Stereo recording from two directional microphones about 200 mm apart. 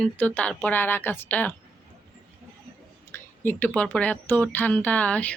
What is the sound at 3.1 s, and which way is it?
Speech, 10° left (ahead or behind).